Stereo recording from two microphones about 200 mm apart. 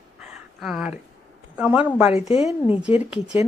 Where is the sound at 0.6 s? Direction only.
5° right (ahead or behind).